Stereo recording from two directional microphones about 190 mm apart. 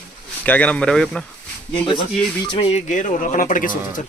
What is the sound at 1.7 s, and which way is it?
Speech, 25° left (ahead or behind).